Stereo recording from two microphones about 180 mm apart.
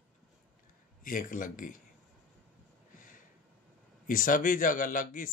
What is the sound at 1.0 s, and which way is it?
Speech, 50° left (ahead or behind).